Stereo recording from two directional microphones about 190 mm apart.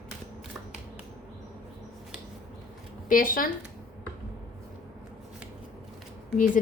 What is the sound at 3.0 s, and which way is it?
Speech, 45° left (ahead or behind).